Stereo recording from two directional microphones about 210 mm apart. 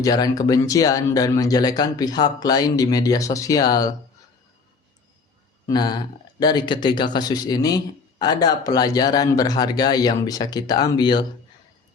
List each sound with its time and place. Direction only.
0.0 s speech: 15° left (ahead or behind)
5.6 s speech: 20° left (ahead or behind)